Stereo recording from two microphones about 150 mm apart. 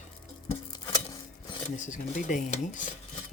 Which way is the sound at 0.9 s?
30° left (ahead or behind).